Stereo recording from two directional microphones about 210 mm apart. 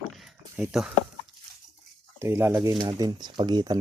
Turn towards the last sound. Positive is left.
turn(degrees=-20)  # may be behind; listen again after turning